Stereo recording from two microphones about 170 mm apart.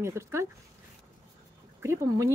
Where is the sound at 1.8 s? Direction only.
15° right (ahead or behind).